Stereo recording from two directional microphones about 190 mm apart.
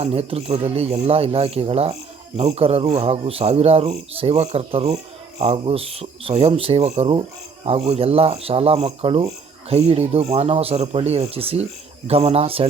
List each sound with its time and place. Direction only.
0.0 s speech: 30° right (ahead or behind)